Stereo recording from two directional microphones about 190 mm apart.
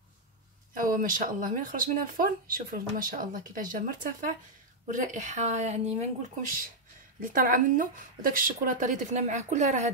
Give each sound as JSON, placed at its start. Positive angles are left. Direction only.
{"t": 0.7, "sound": "a woman's voice", "side_deg": -45}
{"t": 7.2, "sound": "speech", "side_deg": -45}